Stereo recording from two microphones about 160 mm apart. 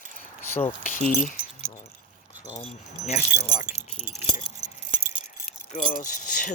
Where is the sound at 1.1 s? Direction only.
60° left (ahead or behind).